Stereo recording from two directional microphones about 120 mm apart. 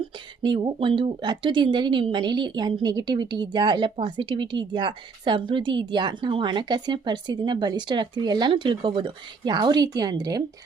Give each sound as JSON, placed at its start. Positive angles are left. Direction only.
{"t": 0.4, "sound": "a woman's voice", "side_deg": -40}